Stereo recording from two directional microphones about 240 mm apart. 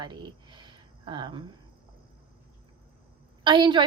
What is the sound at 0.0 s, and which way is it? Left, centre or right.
Speech, centre.